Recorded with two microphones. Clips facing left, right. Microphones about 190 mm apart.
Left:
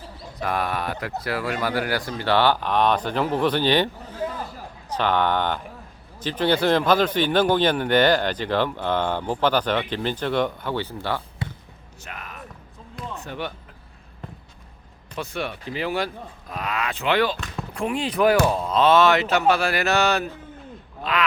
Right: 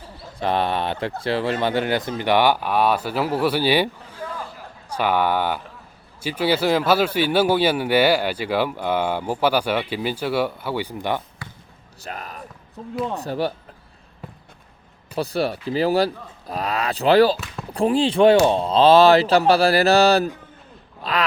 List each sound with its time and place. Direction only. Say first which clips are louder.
0.3 s speech: right 4 dB; 25° right (ahead or behind)
11.4 s basketball bounce: left 7 dB; 25° left (ahead or behind)
12.0 s basketball bounce: right 5 dB; 35° right (ahead or behind)
12.8 s basketball bounce: right 14 dB; 70° right (ahead or behind)
13.1 s speech: right 5 dB; 35° right (ahead or behind)
15.1 s speech: right 7 dB; 35° right (ahead or behind)
17.3 s speech: left 1 dB; 5° right (ahead or behind)
17.7 s speech: right 6 dB; 30° right (ahead or behind)